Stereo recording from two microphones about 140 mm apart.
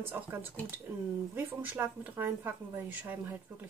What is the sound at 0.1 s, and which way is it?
A woman's voice, 15° right (ahead or behind).